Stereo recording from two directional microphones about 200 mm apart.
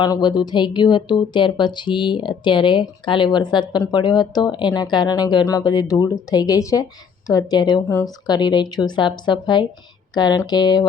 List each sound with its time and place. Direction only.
0.0 s a woman's voice: 20° left (ahead or behind)